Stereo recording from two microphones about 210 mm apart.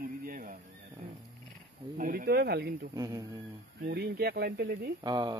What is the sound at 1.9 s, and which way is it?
Speech, 40° right (ahead or behind).